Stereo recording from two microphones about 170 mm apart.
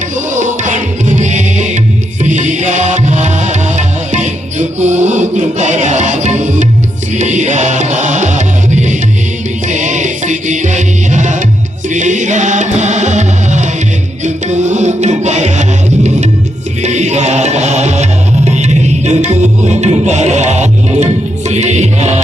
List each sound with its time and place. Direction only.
0.3 s music: 45° right (ahead or behind)